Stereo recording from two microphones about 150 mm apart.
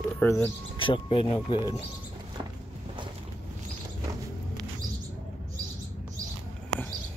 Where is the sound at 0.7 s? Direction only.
35° left (ahead or behind).